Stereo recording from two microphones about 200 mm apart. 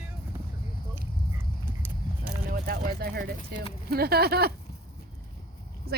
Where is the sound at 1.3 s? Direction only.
10° right (ahead or behind).